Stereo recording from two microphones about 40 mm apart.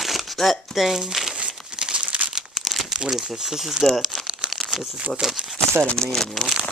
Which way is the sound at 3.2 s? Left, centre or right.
Centre.